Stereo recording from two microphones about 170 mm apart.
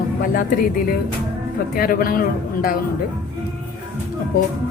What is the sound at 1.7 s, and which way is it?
A woman's voice, 60° left (ahead or behind).